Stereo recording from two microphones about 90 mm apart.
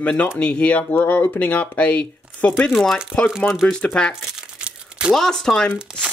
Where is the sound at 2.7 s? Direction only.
5° left (ahead or behind).